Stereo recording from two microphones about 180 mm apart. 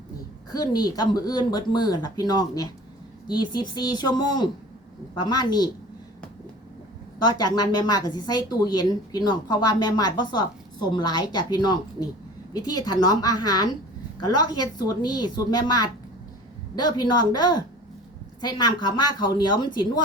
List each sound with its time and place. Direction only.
0.5 s speech: 20° left (ahead or behind)
7.2 s speech: 20° left (ahead or behind)